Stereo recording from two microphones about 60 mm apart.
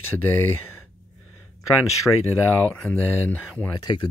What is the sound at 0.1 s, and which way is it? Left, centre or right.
Speech, left.